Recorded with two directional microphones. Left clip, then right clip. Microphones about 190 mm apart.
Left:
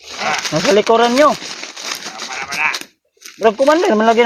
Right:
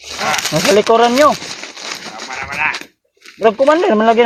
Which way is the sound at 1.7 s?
45° left (ahead or behind).